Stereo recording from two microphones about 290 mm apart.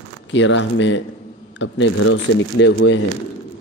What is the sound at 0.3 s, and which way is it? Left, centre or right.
Speech, left.